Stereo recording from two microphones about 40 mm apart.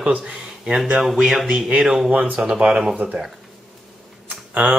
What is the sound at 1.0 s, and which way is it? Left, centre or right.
Speech, centre.